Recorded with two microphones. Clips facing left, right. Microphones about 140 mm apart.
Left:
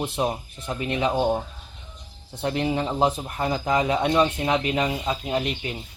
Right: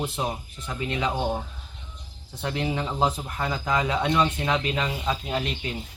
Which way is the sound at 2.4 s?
30° left (ahead or behind).